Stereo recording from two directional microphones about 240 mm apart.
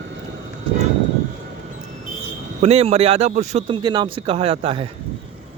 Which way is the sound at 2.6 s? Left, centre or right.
Right.